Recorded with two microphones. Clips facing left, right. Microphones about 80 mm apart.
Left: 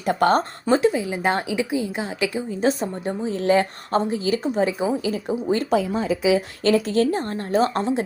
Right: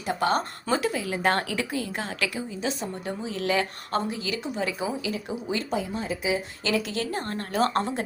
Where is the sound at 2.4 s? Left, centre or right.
Left.